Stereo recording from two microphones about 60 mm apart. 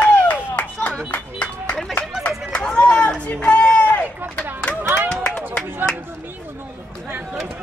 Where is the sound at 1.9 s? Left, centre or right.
Centre.